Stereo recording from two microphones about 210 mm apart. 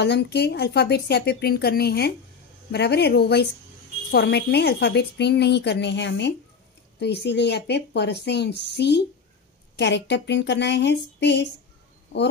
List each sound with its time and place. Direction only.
0.0 s a woman's voice: 50° left (ahead or behind)